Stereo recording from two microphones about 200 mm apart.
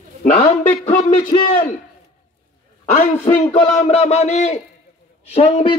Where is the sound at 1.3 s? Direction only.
25° left (ahead or behind).